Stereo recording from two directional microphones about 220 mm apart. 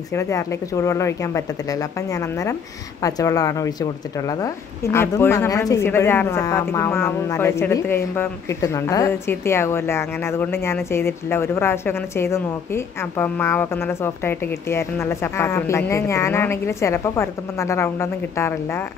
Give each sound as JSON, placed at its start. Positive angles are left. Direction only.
{"t": 0.1, "sound": "speech", "side_deg": 15}